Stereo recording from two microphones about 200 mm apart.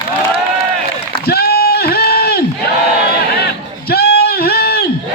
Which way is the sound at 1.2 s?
50° left (ahead or behind).